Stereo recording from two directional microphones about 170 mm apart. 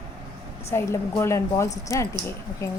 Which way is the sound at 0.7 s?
15° left (ahead or behind).